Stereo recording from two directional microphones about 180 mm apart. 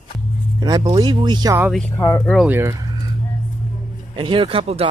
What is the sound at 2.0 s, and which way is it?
Speech, 20° left (ahead or behind).